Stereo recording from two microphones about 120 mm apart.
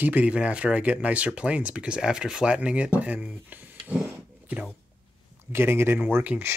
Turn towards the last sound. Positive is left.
turn(degrees=-15)  # may be behind; listen again after turning